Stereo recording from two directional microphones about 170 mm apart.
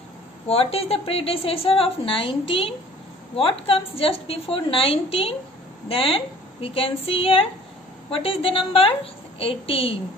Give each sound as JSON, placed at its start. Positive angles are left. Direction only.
{"t": 0.5, "sound": "a woman's voice", "side_deg": 35}